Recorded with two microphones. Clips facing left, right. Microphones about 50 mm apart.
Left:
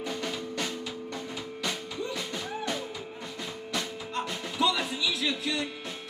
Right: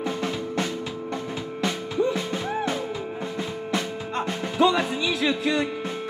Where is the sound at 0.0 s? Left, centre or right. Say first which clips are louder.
Right 6 dB; right.